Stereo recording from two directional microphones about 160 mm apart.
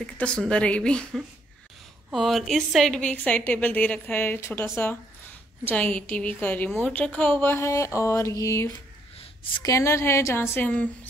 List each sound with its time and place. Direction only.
0.0 s a woman's voice: 5° left (ahead or behind)
5.7 s a woman's voice: 10° left (ahead or behind)